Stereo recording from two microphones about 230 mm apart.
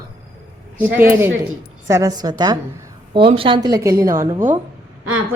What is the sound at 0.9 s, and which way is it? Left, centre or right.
A woman's voice, centre.